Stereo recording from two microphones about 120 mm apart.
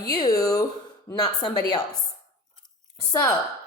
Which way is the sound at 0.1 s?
30° left (ahead or behind).